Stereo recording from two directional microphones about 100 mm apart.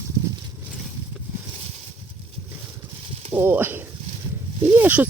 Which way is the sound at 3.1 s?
80° right.